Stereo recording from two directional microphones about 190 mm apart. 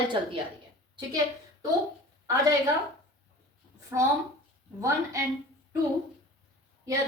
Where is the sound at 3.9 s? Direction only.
15° right (ahead or behind).